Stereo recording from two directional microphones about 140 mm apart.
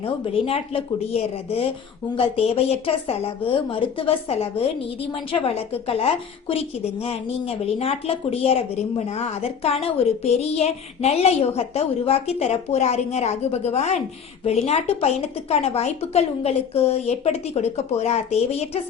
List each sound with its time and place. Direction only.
0.0 s a woman's voice: 45° left (ahead or behind)